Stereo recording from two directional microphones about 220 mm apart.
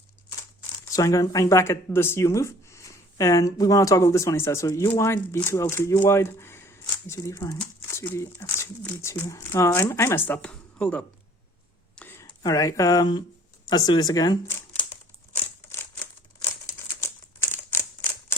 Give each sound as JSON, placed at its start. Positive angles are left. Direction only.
{"t": 0.9, "sound": "speech", "side_deg": 15}
{"t": 17.0, "sound": "typewriter", "side_deg": 10}